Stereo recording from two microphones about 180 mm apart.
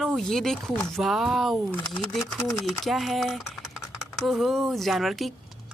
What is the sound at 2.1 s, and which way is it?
A woman's voice, centre (ahead or behind).